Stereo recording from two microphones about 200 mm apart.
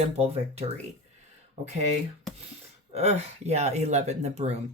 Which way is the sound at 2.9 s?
30° right (ahead or behind).